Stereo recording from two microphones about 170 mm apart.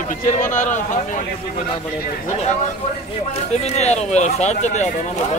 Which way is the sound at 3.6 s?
40° left (ahead or behind).